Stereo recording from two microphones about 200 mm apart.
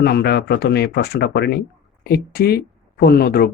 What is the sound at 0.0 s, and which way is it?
Speech, 55° left (ahead or behind).